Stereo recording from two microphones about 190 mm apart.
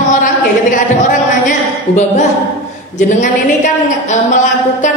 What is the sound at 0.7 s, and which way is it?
Speech, 40° left (ahead or behind).